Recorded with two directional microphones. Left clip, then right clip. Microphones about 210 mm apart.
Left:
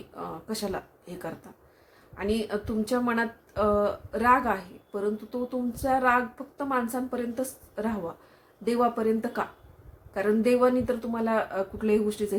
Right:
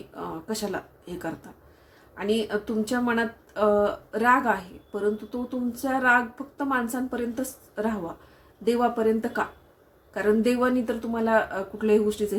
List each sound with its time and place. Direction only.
0.2 s speech: 5° left (ahead or behind)